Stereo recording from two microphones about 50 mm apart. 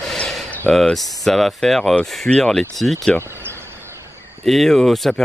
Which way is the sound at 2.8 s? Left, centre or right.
Centre.